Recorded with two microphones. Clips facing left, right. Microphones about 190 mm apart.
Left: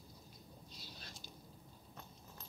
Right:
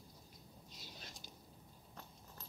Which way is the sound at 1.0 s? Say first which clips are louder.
Even; 15° right (ahead or behind).